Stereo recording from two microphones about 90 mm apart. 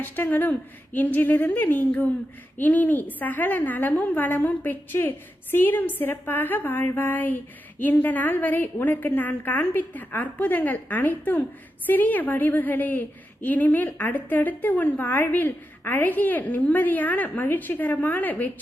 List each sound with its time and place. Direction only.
0.0 s a woman's voice: 20° left (ahead or behind)